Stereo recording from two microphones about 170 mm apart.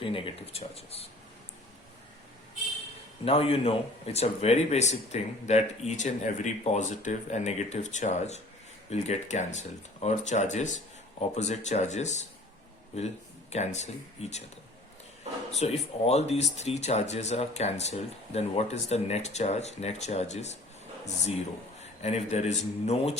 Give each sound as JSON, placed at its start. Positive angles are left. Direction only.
{"t": 0.0, "sound": "speech", "side_deg": 30}
{"t": 3.2, "sound": "speech", "side_deg": 35}
{"t": 13.5, "sound": "speech", "side_deg": 40}
{"t": 15.5, "sound": "speech", "side_deg": 40}
{"t": 21.8, "sound": "a man's voice", "side_deg": 40}